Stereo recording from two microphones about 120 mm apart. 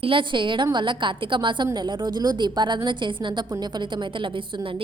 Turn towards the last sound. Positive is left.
turn(degrees=-40)  # may be behind; listen again after turning